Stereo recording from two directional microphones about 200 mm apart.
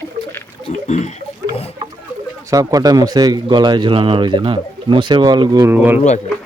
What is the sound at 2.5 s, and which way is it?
Speech, 15° right (ahead or behind).